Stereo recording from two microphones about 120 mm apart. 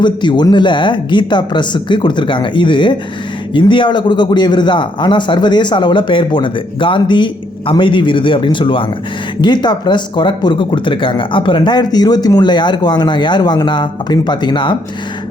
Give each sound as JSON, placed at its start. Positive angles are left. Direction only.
{"t": 0.0, "sound": "speech", "side_deg": 40}